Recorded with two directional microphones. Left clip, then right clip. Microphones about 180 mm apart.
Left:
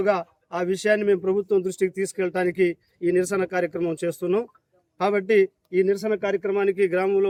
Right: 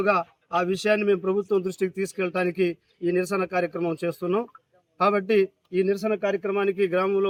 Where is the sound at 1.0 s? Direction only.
35° left (ahead or behind).